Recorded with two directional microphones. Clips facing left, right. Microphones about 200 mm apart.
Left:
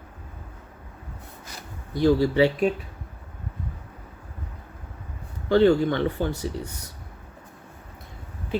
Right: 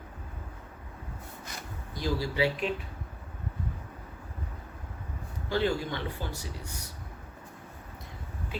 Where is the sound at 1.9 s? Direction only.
60° left (ahead or behind).